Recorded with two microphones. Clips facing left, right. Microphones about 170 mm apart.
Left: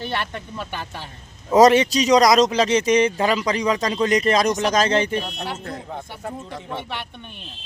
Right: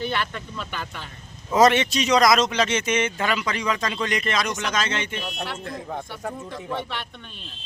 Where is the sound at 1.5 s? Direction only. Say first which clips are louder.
Left 4 dB; 35° left (ahead or behind).